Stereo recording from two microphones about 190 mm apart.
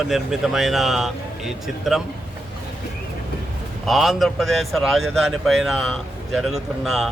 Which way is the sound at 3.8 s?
Centre (ahead or behind).